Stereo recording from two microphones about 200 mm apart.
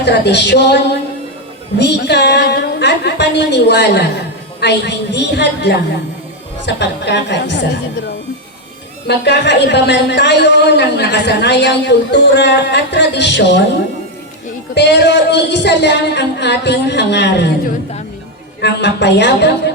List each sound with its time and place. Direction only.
0.0 s a woman's voice: 60° left (ahead or behind)
1.8 s a woman's voice: 60° left (ahead or behind)
14.8 s a woman's voice: 60° left (ahead or behind)
18.6 s a woman's voice: 60° left (ahead or behind)